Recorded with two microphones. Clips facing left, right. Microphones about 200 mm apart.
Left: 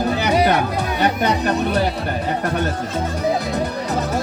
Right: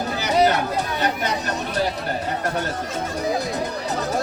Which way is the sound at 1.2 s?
60° left (ahead or behind).